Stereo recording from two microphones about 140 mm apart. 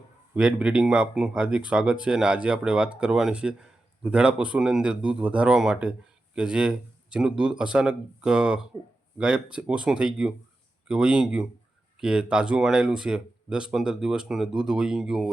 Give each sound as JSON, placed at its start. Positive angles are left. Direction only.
{"t": 0.3, "sound": "speech", "side_deg": -5}